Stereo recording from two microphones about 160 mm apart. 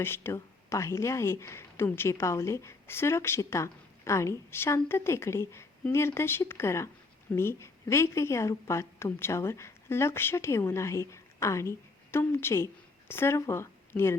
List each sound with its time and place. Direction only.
0.0 s a woman's voice: 15° left (ahead or behind)